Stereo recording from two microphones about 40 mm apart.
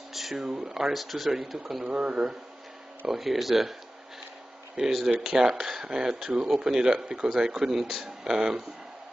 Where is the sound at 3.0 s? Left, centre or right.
Centre.